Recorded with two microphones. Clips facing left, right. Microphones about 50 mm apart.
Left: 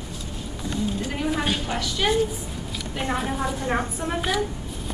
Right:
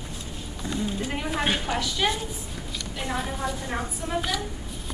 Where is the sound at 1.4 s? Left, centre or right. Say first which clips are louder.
Even; centre.